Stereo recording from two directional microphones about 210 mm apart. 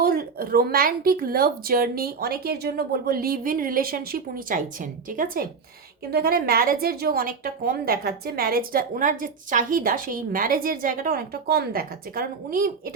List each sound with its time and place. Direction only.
0.0 s a woman's voice: 45° right (ahead or behind)